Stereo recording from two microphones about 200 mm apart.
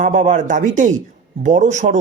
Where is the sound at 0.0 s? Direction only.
40° right (ahead or behind).